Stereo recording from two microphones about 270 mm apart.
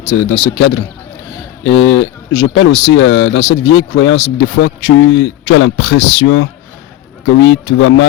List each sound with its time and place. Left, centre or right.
0.0 s speech: left